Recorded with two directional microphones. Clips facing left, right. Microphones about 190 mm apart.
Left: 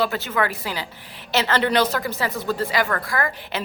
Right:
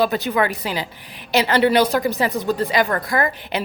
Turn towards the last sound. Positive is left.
turn(degrees=-20)  # may be behind; listen again after turning